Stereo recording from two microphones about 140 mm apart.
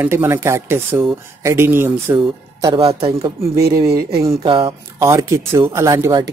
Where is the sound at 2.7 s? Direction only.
40° right (ahead or behind).